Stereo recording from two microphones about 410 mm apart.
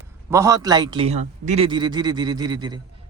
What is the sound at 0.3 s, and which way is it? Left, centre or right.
A man's voice, centre.